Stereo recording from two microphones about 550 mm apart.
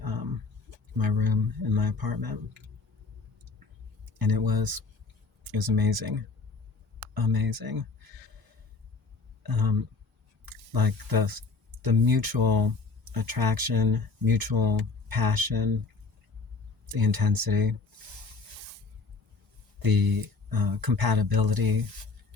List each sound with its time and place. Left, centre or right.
0.0 s a sound: right
0.9 s speech: right
4.2 s speech: right
9.4 s speech: right
16.8 s speech: right
19.8 s speech: right